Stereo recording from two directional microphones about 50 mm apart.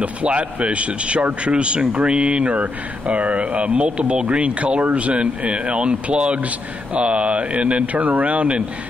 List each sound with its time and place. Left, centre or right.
0.0 s speech: right